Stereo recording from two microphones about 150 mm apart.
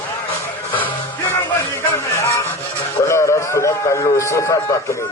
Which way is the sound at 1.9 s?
20° left (ahead or behind).